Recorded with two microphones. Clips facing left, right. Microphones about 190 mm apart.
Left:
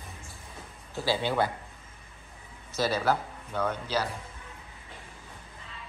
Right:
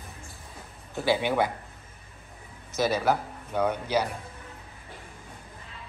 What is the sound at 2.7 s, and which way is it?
Speech, 15° right (ahead or behind).